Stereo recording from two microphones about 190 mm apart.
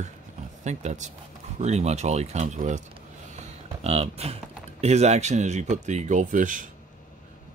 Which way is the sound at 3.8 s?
35° right (ahead or behind).